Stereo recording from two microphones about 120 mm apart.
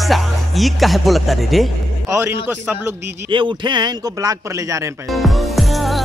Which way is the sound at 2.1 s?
20° right (ahead or behind).